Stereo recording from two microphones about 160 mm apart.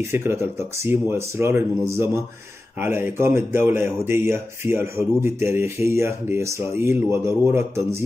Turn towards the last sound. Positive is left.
turn(degrees=-15)  # may be behind; listen again after turning